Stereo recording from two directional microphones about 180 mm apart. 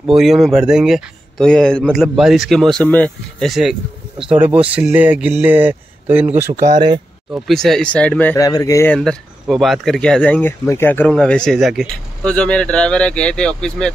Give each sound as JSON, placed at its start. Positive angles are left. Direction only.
{"t": 0.0, "sound": "a man's voice", "side_deg": 0}
{"t": 7.3, "sound": "speech", "side_deg": 0}
{"t": 8.9, "sound": "speech", "side_deg": 0}